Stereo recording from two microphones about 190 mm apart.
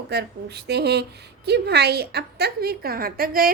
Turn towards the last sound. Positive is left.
turn(degrees=-50)  # may be behind; listen again after turning